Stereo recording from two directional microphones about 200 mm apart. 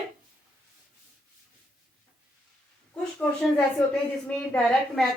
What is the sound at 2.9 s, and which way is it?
A woman's voice, 5° left (ahead or behind).